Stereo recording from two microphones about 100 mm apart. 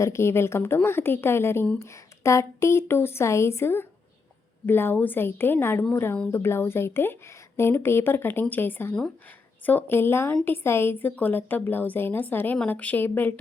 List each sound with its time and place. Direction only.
0.0 s speech: 25° left (ahead or behind)